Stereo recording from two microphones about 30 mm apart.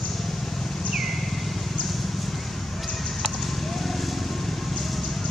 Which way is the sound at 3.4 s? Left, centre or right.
Centre.